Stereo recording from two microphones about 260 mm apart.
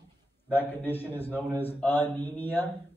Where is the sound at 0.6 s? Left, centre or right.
Centre.